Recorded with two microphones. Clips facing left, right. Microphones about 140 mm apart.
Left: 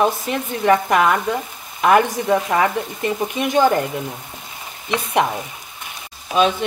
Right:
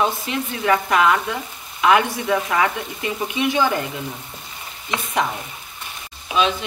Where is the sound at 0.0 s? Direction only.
45° left (ahead or behind).